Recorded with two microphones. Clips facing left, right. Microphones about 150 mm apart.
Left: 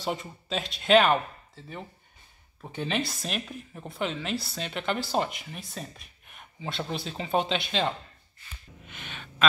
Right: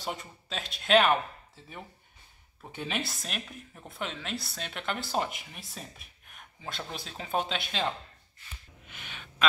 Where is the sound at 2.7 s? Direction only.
5° right (ahead or behind).